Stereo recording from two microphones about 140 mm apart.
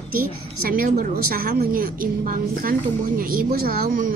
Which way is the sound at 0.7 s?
85° right.